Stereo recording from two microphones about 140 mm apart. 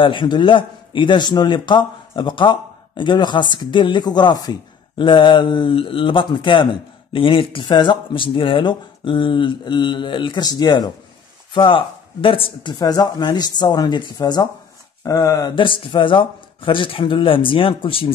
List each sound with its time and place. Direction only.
0.0 s speech: 35° left (ahead or behind)
15.5 s speech: 35° left (ahead or behind)